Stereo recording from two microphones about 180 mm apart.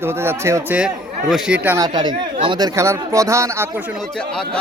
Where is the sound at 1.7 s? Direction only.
25° right (ahead or behind).